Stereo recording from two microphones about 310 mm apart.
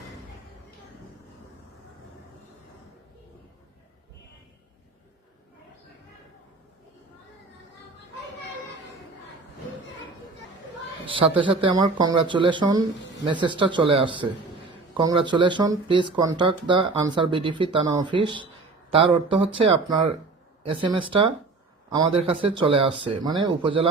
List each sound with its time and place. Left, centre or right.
11.0 s speech: centre